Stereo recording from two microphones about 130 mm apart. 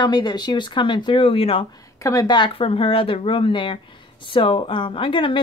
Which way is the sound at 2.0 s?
25° left (ahead or behind).